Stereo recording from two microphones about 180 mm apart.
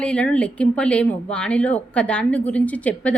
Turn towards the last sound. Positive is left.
turn(degrees=10)  # may be behind; listen again after turning